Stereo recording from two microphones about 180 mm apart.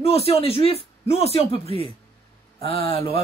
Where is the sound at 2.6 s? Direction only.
30° left (ahead or behind).